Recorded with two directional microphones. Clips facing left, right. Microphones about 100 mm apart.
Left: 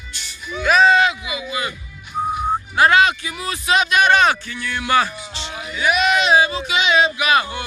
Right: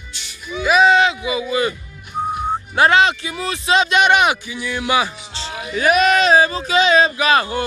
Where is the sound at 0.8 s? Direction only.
25° right (ahead or behind).